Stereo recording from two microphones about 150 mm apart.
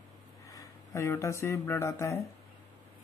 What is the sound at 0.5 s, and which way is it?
Speech, 20° left (ahead or behind).